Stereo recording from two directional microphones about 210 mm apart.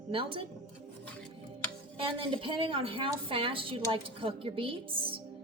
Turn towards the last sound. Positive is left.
turn(degrees=-25)  # may be behind; listen again after turning